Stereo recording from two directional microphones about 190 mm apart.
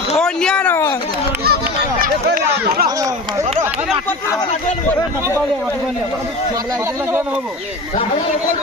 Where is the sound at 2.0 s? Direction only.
50° right (ahead or behind).